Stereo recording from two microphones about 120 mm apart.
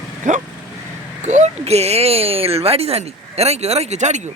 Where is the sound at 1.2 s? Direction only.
75° right (ahead or behind).